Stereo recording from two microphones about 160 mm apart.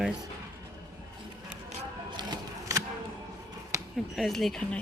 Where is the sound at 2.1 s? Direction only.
25° right (ahead or behind).